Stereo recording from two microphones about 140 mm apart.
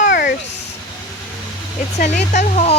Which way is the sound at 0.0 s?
85° left.